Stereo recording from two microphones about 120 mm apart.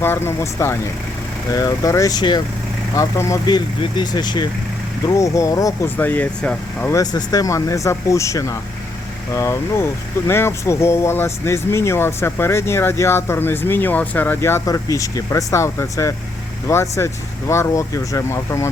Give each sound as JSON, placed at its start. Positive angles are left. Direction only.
{"t": 0.0, "sound": "speech", "side_deg": 20}
{"t": 3.4, "sound": "speech", "side_deg": 35}
{"t": 5.0, "sound": "speech", "side_deg": 25}
{"t": 6.0, "sound": "speech", "side_deg": 15}
{"t": 6.9, "sound": "speech", "side_deg": 35}